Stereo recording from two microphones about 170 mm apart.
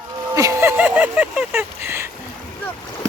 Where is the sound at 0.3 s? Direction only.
15° right (ahead or behind).